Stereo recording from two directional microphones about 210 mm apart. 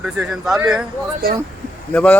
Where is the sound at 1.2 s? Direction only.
45° right (ahead or behind).